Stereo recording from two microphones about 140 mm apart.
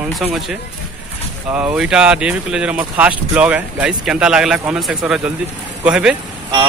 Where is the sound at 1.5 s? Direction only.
10° right (ahead or behind).